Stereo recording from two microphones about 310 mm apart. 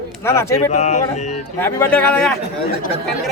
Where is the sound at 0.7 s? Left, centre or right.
Left.